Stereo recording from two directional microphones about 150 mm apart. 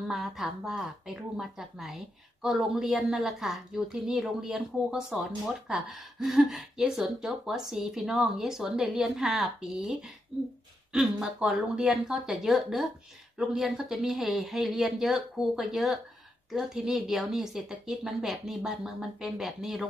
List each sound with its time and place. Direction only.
0.1 s speech: centre (ahead or behind)